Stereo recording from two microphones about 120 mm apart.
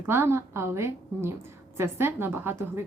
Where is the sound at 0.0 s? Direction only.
20° right (ahead or behind).